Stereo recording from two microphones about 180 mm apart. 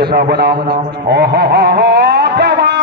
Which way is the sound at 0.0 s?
60° right (ahead or behind).